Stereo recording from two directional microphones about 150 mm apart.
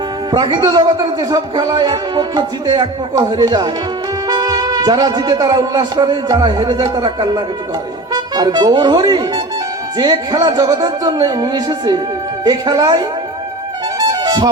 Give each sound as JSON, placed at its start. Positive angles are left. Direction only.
{"t": 0.3, "sound": "a man's voice", "side_deg": -30}
{"t": 14.1, "sound": "music", "side_deg": -25}